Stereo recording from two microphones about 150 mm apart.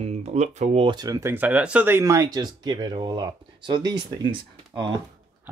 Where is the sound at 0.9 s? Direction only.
25° right (ahead or behind).